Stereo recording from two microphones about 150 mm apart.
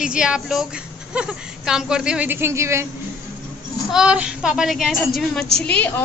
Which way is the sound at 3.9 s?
5° right (ahead or behind).